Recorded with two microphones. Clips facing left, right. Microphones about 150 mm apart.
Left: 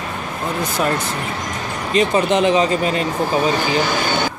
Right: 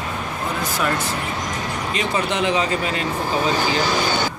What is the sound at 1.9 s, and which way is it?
Speech, 40° left (ahead or behind).